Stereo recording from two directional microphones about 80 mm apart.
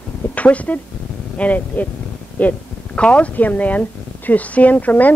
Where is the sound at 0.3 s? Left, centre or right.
Centre.